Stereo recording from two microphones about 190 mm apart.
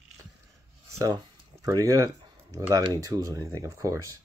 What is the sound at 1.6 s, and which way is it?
Speech, 15° right (ahead or behind).